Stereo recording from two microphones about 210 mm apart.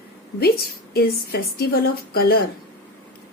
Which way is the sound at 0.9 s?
45° left (ahead or behind).